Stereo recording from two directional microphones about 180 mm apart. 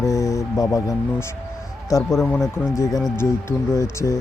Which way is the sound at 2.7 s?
15° left (ahead or behind).